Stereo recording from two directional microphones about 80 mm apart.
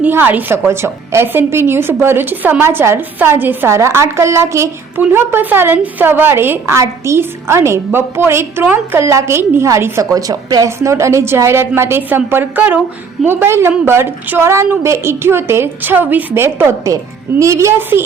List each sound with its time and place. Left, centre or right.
0.0 s a woman's voice: right
3.7 s a woman's voice: right
10.7 s a woman's voice: right